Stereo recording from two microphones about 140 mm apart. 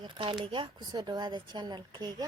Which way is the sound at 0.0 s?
40° right (ahead or behind).